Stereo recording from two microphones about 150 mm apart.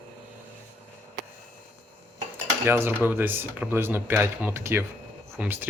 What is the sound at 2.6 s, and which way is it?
Speech, 15° right (ahead or behind).